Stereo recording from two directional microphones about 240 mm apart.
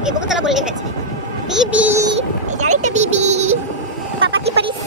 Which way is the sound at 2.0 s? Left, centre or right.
Right.